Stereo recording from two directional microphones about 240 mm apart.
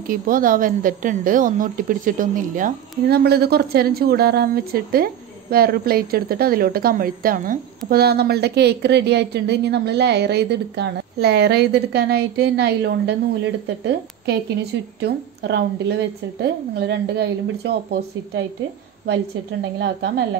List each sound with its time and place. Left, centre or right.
0.1 s a woman's voice: right
19.8 s a woman's voice: right